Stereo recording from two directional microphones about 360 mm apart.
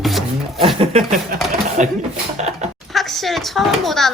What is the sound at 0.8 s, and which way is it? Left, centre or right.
Speech, centre.